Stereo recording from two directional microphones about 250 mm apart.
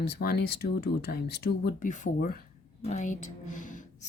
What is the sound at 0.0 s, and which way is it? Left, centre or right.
Speech, left.